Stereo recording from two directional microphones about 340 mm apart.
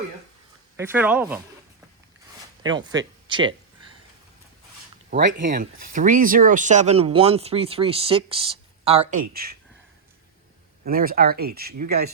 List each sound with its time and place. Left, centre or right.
0.8 s speech: centre
2.6 s speech: centre
5.1 s speech: right
10.8 s speech: right